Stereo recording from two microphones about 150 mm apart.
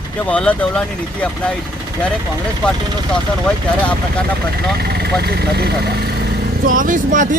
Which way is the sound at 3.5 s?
5° left (ahead or behind).